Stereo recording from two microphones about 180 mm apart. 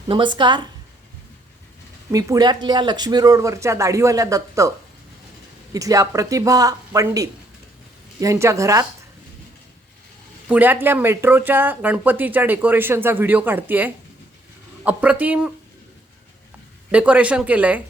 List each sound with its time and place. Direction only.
0.1 s speech: 25° right (ahead or behind)
2.1 s speech: 20° right (ahead or behind)
5.7 s speech: 20° right (ahead or behind)
10.5 s speech: 10° right (ahead or behind)
16.9 s speech: 5° right (ahead or behind)